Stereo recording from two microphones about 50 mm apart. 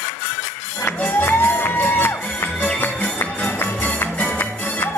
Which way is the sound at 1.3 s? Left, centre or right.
Left.